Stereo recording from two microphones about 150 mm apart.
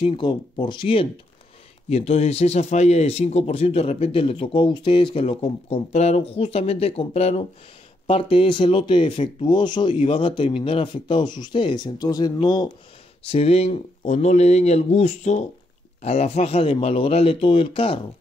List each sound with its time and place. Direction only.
0.0 s speech: 35° left (ahead or behind)
1.9 s a man's voice: 45° left (ahead or behind); by 12.7 s 30° left (ahead or behind)
13.2 s a man's voice: 45° left (ahead or behind)